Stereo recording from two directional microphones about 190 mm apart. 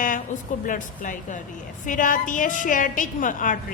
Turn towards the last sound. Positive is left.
turn(degrees=45)  # may be behind; listen again after turning